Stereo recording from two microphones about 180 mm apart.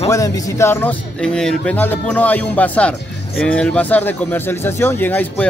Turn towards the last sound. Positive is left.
turn(degrees=10)  # may be behind; listen again after turning